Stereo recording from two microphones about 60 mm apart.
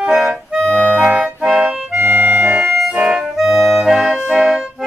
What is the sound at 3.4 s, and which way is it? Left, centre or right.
Music, centre.